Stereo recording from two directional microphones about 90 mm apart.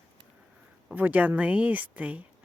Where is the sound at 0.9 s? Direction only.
20° right (ahead or behind).